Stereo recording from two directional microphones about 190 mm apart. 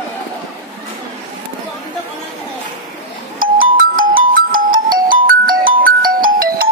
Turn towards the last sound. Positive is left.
turn(degrees=-50)  # may be behind; listen again after turning